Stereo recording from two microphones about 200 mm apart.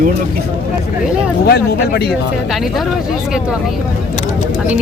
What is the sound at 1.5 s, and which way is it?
Speech, 55° left (ahead or behind).